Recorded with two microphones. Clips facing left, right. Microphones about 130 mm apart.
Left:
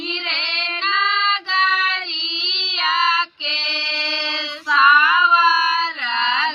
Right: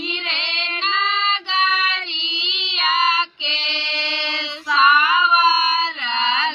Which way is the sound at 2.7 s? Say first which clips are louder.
Even; 15° right (ahead or behind).